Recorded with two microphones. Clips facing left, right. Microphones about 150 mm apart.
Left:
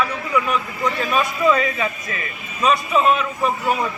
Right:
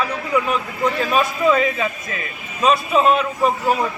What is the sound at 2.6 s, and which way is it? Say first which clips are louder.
Speech: right 1 dB; 30° right (ahead or behind).